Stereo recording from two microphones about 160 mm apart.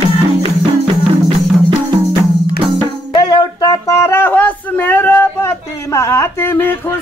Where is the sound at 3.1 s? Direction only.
25° left (ahead or behind).